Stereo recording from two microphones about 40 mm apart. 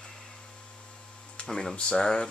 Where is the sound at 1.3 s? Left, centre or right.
Left.